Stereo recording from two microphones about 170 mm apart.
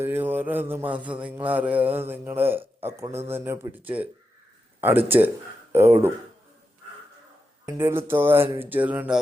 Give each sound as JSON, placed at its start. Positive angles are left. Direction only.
{"t": 0.0, "sound": "mantra", "side_deg": -10}
{"t": 1.2, "sound": "speech", "side_deg": -10}
{"t": 7.7, "sound": "speech", "side_deg": -15}